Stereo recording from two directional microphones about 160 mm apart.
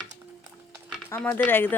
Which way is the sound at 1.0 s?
10° left (ahead or behind).